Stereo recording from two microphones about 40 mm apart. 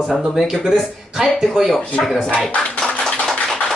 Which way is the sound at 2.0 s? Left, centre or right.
Centre.